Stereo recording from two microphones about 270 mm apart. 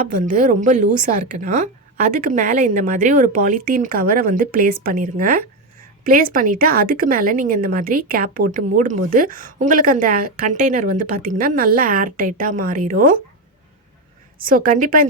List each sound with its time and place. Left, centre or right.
0.0 s a woman's voice: right
14.4 s a woman's voice: right